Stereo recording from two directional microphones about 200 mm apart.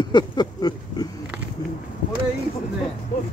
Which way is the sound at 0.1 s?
20° left (ahead or behind).